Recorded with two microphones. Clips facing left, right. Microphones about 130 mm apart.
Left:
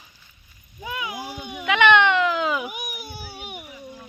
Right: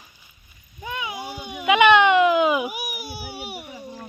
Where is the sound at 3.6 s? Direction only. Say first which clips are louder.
Right 3 dB; 30° right (ahead or behind).